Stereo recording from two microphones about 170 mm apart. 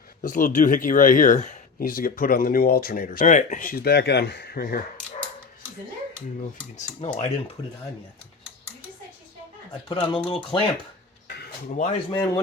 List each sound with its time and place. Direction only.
0.2 s speech: 50° left (ahead or behind)
7.0 s speech: 40° left (ahead or behind)
9.9 s speech: 30° left (ahead or behind)
11.3 s a sound: 50° left (ahead or behind)
12.1 s speech: 20° left (ahead or behind)